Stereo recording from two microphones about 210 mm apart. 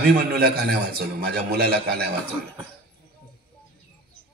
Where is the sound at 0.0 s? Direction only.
50° right (ahead or behind).